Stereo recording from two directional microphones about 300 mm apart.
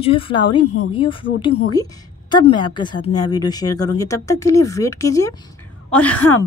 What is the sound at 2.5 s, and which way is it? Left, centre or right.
Speech, centre.